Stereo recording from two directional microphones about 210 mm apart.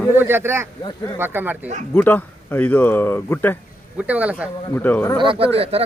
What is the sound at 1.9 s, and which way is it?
Speech, 10° left (ahead or behind).